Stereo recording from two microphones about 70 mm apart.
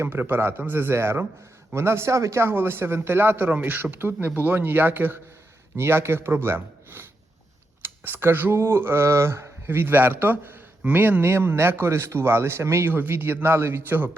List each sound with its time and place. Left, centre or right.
0.0 s speech: right
12.9 s speech: right